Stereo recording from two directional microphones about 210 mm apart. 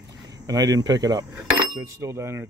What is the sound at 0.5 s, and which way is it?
Speech, 15° right (ahead or behind).